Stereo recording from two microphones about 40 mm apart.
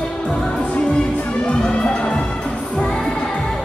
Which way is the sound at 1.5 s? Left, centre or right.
Left.